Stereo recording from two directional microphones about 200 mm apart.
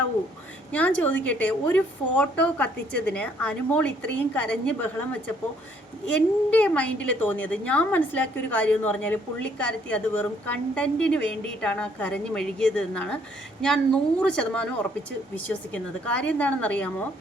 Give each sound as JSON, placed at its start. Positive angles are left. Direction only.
{"t": 0.7, "sound": "a woman's voice", "side_deg": 10}
{"t": 6.1, "sound": "a woman's voice", "side_deg": 5}
{"t": 15.7, "sound": "a woman's voice", "side_deg": 5}